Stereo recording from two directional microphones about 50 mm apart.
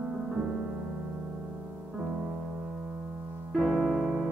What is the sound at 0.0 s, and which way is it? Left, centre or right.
Music, centre.